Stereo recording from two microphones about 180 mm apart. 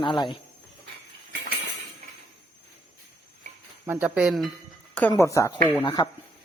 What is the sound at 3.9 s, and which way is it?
Speech, 5° right (ahead or behind).